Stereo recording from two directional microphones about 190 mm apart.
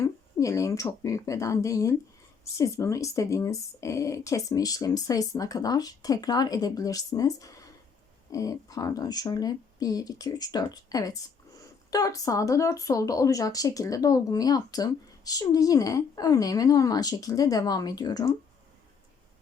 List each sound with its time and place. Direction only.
0.0 s speech: 15° left (ahead or behind)